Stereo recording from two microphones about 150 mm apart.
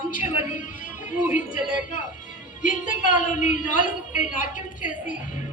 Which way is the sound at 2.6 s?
60° left (ahead or behind).